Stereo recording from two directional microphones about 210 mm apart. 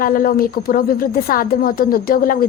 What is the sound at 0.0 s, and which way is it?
A woman's voice, 45° left (ahead or behind).